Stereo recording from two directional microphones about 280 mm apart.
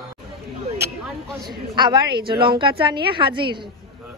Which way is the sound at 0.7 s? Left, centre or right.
Centre.